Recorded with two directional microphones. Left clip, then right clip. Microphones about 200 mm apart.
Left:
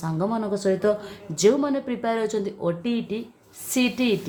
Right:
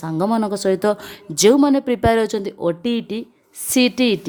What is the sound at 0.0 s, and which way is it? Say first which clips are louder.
Speech: right 6 dB; 45° right (ahead or behind).